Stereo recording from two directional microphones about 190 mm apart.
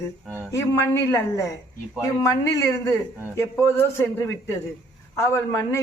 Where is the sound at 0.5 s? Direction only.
15° left (ahead or behind).